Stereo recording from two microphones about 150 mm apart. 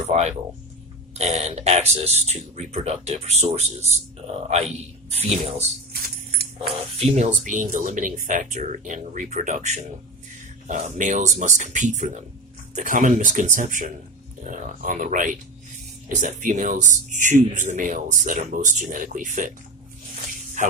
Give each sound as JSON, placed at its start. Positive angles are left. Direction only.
{"t": 0.1, "sound": "speech", "side_deg": -45}
{"t": 7.0, "sound": "speech", "side_deg": -50}
{"t": 20.6, "sound": "speech", "side_deg": -55}